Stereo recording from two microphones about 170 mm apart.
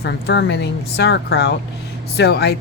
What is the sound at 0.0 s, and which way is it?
Speech, 80° left.